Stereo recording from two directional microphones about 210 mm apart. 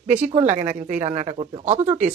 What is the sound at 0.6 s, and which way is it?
Speech, 10° right (ahead or behind).